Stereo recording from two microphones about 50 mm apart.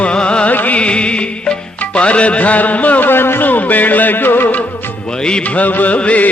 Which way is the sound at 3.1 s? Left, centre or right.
Left.